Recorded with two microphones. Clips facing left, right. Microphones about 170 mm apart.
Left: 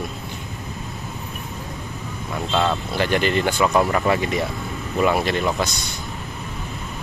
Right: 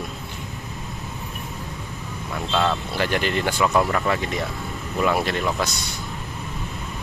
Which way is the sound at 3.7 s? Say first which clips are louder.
Left 2 dB; 15° left (ahead or behind).